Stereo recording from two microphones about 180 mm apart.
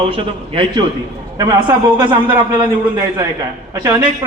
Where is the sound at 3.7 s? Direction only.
20° right (ahead or behind).